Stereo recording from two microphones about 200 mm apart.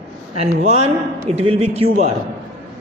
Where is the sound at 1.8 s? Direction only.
45° right (ahead or behind).